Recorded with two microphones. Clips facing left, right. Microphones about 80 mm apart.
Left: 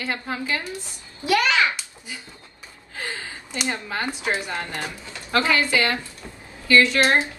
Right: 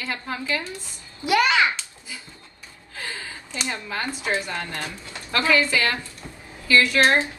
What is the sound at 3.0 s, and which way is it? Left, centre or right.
A woman's voice, left.